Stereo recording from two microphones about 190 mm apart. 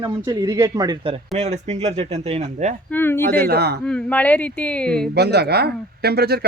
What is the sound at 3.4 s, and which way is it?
Speech, 55° right (ahead or behind).